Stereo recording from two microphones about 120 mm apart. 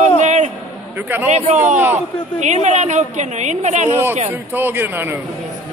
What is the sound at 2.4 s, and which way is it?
A woman's voice, 80° right.